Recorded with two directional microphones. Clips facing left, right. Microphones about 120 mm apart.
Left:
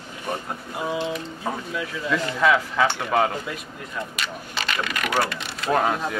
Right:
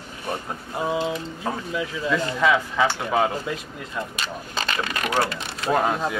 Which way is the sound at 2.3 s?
Centre (ahead or behind).